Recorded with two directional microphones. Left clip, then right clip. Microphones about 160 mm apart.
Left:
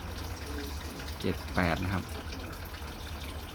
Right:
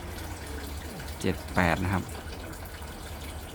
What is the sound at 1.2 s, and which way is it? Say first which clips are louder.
Speech: right 4 dB; 20° right (ahead or behind).